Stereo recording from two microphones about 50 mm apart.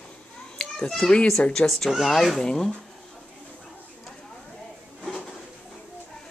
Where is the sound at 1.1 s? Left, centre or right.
Centre.